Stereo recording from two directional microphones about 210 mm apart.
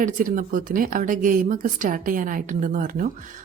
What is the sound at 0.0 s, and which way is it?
A woman's voice, 40° right (ahead or behind).